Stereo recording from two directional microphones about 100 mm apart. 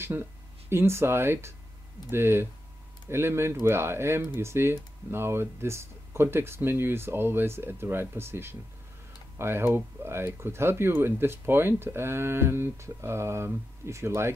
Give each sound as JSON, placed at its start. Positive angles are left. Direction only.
{"t": 0.0, "sound": "speech", "side_deg": -25}